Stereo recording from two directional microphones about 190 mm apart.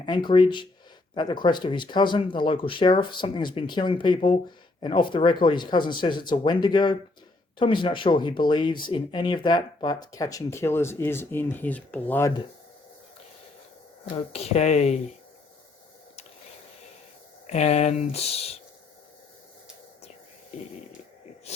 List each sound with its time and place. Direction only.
0.0 s speech: 25° left (ahead or behind)
14.3 s speech: 35° left (ahead or behind)
17.4 s speech: 35° left (ahead or behind)